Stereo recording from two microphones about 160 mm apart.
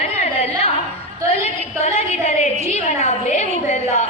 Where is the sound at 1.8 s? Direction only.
40° left (ahead or behind).